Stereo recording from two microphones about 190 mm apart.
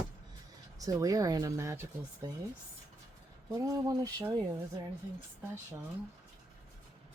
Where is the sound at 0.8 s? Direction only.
20° right (ahead or behind).